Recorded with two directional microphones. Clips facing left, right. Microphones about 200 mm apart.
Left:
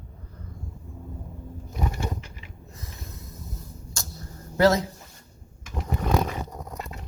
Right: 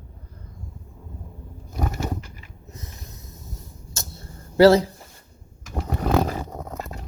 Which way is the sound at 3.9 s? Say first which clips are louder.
Right 2 dB; 25° right (ahead or behind).